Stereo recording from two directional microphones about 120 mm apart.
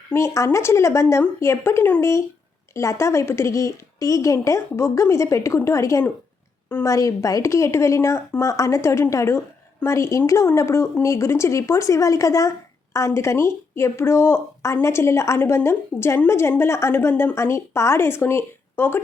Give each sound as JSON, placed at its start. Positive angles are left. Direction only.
{"t": 0.1, "sound": "speech", "side_deg": 25}